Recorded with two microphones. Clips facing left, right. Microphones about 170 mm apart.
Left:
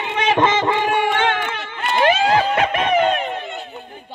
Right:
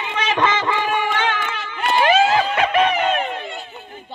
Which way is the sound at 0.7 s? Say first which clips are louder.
Left 3 dB; 55° left (ahead or behind).